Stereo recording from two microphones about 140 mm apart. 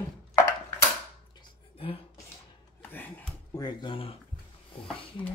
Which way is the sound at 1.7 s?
40° left (ahead or behind).